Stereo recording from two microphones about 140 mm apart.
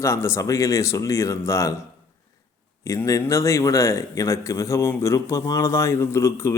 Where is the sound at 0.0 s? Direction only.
20° left (ahead or behind).